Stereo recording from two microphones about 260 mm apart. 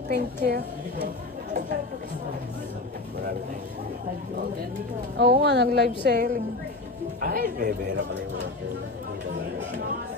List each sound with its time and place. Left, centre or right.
0.1 s a woman's voice: right
5.2 s a woman's voice: right